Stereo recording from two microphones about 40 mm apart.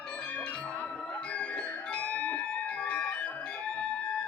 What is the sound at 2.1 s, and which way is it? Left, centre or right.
Music, left.